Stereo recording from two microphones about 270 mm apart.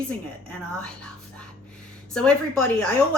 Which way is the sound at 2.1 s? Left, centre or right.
Centre.